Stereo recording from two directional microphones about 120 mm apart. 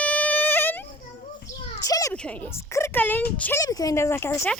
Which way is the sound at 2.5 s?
20° left (ahead or behind).